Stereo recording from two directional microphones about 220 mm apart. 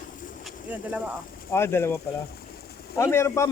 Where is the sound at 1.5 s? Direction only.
10° left (ahead or behind).